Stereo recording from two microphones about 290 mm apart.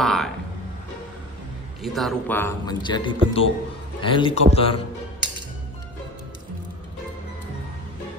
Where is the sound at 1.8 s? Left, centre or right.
Centre.